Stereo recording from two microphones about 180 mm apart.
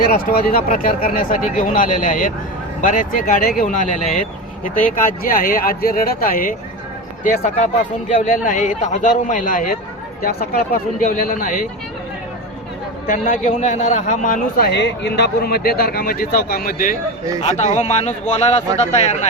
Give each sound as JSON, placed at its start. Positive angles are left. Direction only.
{"t": 0.0, "sound": "a man's voice", "side_deg": 55}
{"t": 11.0, "sound": "a man's voice", "side_deg": 50}
{"t": 13.1, "sound": "a man's voice", "side_deg": 50}